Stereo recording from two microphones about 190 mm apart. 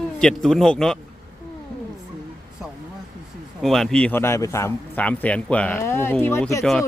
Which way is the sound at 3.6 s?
Centre (ahead or behind).